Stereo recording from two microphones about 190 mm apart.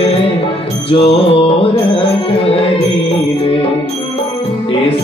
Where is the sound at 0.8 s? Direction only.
30° left (ahead or behind).